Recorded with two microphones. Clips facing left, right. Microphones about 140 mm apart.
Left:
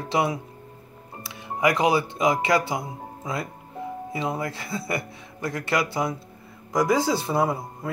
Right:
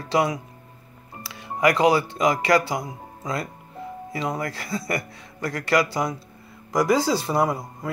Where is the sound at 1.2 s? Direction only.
20° left (ahead or behind).